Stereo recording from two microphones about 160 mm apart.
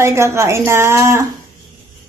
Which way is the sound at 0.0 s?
15° right (ahead or behind).